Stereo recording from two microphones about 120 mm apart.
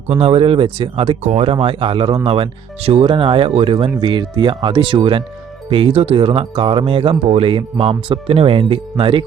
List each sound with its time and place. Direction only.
0.2 s speech: 50° right (ahead or behind)